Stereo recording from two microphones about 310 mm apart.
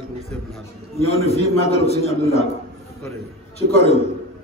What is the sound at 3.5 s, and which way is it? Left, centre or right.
Speech, centre.